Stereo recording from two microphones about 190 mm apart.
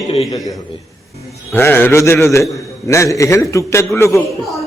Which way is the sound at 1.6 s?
10° left (ahead or behind).